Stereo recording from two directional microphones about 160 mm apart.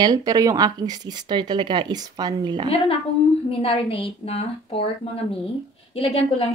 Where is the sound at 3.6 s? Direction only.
35° left (ahead or behind).